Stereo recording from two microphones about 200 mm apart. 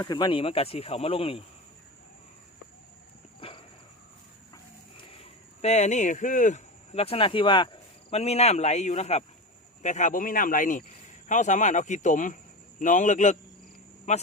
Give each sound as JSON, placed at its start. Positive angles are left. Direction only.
{"t": 0.0, "sound": "speech", "side_deg": 20}
{"t": 3.4, "sound": "a sound", "side_deg": 25}
{"t": 5.2, "sound": "speech", "side_deg": 35}